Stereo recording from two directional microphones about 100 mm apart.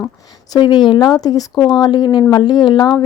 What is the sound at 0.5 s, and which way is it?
Speech, 50° left (ahead or behind).